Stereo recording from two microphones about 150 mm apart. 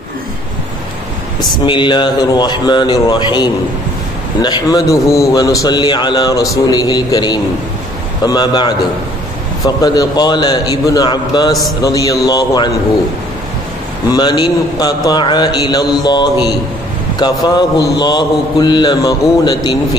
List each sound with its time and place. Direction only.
1.4 s a man's voice: 30° left (ahead or behind)
14.1 s a man's voice: 30° left (ahead or behind)